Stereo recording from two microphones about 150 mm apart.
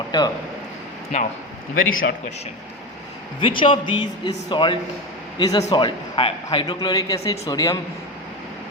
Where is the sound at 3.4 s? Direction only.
35° left (ahead or behind).